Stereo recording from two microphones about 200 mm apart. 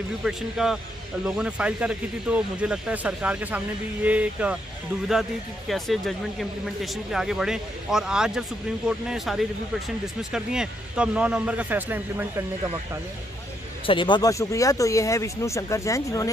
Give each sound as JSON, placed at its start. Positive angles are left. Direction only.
{"t": 0.2, "sound": "speech", "side_deg": 0}
{"t": 5.7, "sound": "speech", "side_deg": 0}
{"t": 13.8, "sound": "speech", "side_deg": 25}